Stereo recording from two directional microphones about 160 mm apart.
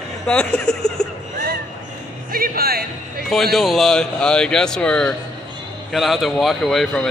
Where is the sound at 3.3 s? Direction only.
Centre (ahead or behind).